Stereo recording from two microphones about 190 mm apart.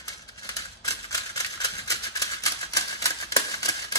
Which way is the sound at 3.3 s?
20° left (ahead or behind).